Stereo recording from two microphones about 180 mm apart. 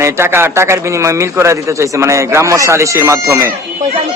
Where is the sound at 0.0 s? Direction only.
15° right (ahead or behind).